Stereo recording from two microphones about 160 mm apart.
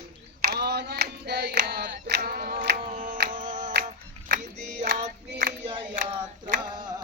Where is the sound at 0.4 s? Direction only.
85° right; by 3.7 s 55° right (ahead or behind).